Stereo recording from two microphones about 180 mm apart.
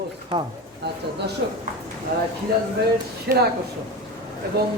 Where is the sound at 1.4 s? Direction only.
65° right (ahead or behind).